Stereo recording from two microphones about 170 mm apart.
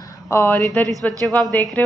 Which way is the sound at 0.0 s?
20° left (ahead or behind).